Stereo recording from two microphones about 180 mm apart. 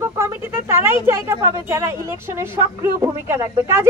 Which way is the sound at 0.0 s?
15° right (ahead or behind).